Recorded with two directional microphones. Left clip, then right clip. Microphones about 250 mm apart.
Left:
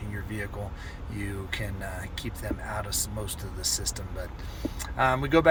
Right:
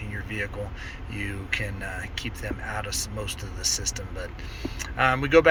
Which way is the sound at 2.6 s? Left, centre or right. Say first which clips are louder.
Right 3 dB; centre.